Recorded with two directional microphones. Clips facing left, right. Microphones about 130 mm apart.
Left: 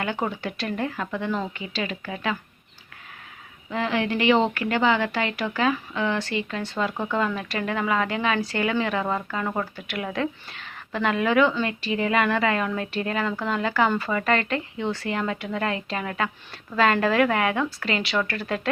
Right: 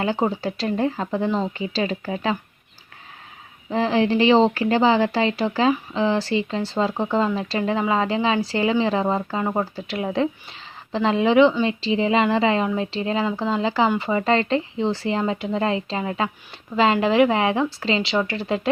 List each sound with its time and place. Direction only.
0.0 s speech: 30° right (ahead or behind)
3.7 s speech: 30° right (ahead or behind)